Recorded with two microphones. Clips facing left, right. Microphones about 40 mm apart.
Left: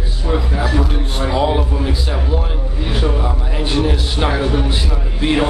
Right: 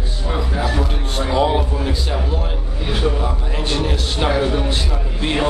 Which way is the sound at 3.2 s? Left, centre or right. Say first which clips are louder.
Left 2 dB; centre.